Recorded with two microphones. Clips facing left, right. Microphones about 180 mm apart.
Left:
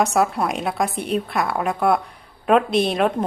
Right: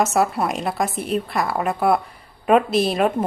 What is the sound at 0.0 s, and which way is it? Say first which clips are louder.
A woman's voice: even; centre (ahead or behind).